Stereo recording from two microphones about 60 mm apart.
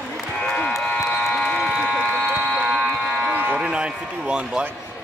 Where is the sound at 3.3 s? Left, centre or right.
Right.